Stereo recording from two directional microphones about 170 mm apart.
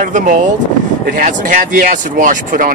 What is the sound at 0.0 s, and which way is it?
A man's voice, 50° right (ahead or behind).